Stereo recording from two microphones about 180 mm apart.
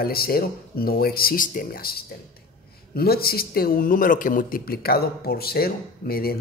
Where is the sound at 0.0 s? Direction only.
55° left (ahead or behind).